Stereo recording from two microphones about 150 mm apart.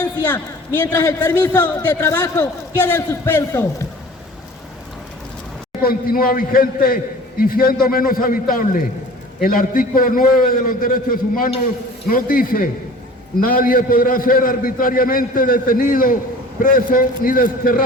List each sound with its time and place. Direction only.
0.0 s a man's voice: 10° left (ahead or behind)
5.8 s a man's voice: 75° left (ahead or behind)